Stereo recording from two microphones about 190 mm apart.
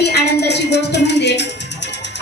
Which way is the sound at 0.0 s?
60° left (ahead or behind).